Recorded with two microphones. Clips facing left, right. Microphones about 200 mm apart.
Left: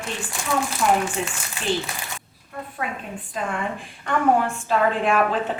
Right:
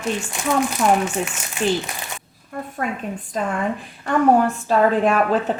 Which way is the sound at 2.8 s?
45° right (ahead or behind).